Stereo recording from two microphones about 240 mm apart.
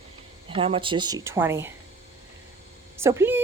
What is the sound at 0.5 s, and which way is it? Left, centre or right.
A woman's voice, right.